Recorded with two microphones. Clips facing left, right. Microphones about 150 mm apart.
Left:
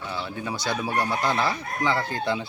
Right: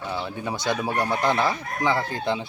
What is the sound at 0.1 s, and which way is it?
Chicken, 20° right (ahead or behind).